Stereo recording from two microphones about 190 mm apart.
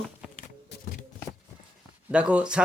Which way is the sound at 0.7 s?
60° left (ahead or behind).